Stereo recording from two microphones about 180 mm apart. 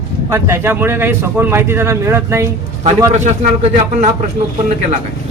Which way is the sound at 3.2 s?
40° right (ahead or behind).